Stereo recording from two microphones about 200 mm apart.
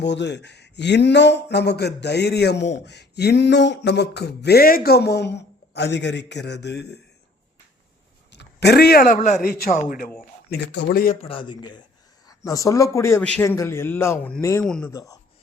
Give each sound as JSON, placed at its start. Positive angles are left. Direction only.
{"t": 0.0, "sound": "speech", "side_deg": 60}
{"t": 8.3, "sound": "a man's voice", "side_deg": 55}
{"t": 10.5, "sound": "speech", "side_deg": 55}
{"t": 11.2, "sound": "a man's voice", "side_deg": 25}
{"t": 14.9, "sound": "a man's voice", "side_deg": 15}